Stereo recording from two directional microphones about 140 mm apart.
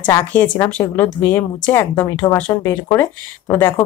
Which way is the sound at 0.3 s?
10° left (ahead or behind).